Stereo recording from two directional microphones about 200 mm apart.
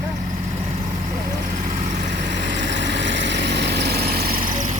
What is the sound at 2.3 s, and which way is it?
Vehicle, 60° right (ahead or behind).